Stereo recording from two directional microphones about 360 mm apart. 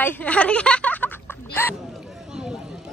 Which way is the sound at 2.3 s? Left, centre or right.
Centre.